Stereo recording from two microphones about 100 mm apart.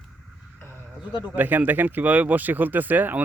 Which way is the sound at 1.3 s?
20° right (ahead or behind).